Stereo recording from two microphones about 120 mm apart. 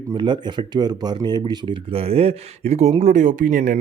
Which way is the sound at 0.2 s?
40° right (ahead or behind).